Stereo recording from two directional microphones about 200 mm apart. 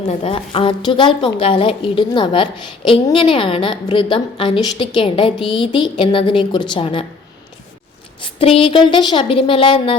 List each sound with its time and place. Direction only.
0.1 s a woman's voice: 30° left (ahead or behind)
8.2 s a woman's voice: 30° left (ahead or behind)